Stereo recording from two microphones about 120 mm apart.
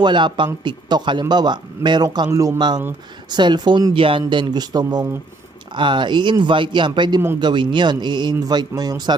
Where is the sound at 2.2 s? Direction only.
25° right (ahead or behind).